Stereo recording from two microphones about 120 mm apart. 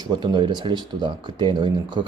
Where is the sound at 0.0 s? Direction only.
35° right (ahead or behind).